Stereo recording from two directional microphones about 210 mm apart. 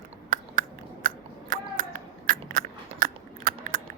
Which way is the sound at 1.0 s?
40° right (ahead or behind).